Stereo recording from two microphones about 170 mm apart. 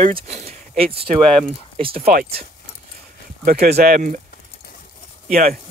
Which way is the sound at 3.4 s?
60° right (ahead or behind).